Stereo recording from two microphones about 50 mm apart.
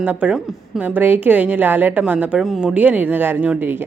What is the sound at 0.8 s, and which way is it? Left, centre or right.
A woman's voice, right.